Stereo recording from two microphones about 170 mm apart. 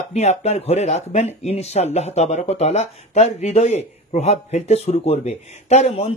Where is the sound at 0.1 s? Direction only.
40° left (ahead or behind).